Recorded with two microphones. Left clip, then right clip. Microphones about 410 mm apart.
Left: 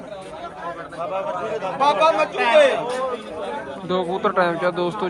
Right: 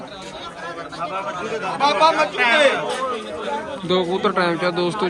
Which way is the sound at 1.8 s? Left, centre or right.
Centre.